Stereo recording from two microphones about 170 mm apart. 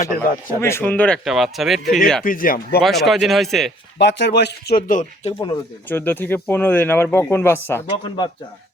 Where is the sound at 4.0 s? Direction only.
90° left; by 5.3 s 50° left (ahead or behind).